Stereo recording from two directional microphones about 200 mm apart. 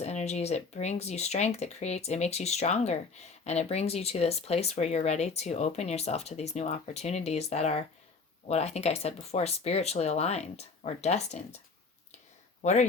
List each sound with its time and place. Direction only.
0.0 s speech: 35° left (ahead or behind)
12.6 s speech: 35° left (ahead or behind)